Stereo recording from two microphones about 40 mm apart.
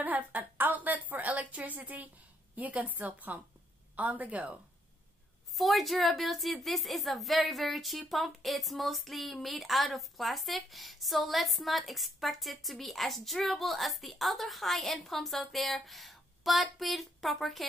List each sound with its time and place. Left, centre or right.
0.0 s a sound: right
2.5 s a woman's voice: right
5.6 s speech: centre